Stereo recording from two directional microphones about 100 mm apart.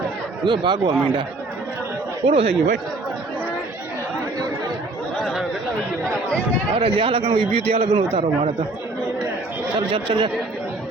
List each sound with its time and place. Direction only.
0.4 s speech: 50° right (ahead or behind)
2.2 s speech: 80° right
5.2 s chatter: centre (ahead or behind)
6.1 s run: 10° left (ahead or behind)
6.7 s a man's voice: 65° right (ahead or behind)
8.1 s speech: 90° right
9.7 s speech: 60° right (ahead or behind)